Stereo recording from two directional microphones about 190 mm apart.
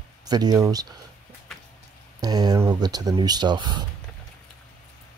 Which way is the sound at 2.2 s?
20° right (ahead or behind).